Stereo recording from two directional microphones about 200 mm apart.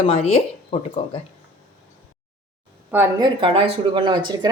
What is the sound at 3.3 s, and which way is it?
Speech, 25° right (ahead or behind).